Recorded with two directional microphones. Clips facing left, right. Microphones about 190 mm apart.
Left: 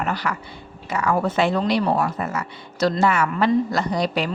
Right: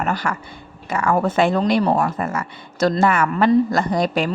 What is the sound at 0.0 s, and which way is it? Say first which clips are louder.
Speech: right 2 dB; 45° right (ahead or behind).